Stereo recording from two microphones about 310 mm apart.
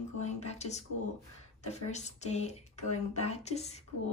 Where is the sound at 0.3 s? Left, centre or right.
Left.